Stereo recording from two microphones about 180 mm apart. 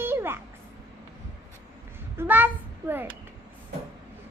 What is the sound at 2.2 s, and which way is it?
Speech, 10° right (ahead or behind).